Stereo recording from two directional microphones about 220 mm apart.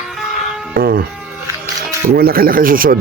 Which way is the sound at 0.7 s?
45° right (ahead or behind).